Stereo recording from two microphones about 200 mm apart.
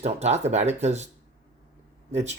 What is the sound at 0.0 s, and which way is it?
Speech, 35° right (ahead or behind).